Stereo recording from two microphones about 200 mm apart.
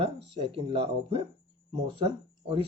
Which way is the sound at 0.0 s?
25° right (ahead or behind).